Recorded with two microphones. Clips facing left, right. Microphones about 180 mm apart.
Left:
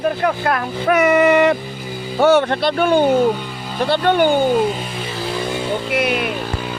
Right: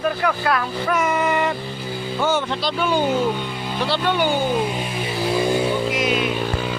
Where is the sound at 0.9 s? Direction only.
65° left (ahead or behind).